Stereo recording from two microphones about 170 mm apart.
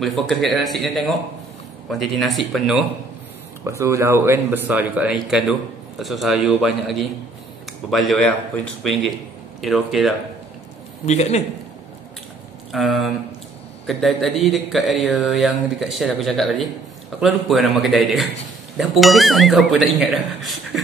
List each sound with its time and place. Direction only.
0.0 s speech: centre (ahead or behind)
3.6 s speech: 15° right (ahead or behind); by 8.3 s centre (ahead or behind)
9.6 s speech: centre (ahead or behind)
11.1 s a man's voice: 40° left (ahead or behind)
12.7 s speech: centre (ahead or behind)